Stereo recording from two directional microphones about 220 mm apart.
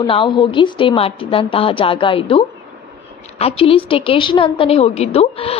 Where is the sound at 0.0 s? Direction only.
20° left (ahead or behind).